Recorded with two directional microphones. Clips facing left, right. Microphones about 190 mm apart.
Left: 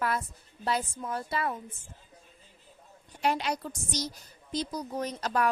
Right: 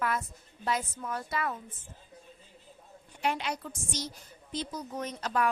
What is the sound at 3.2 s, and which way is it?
Speech, 40° left (ahead or behind).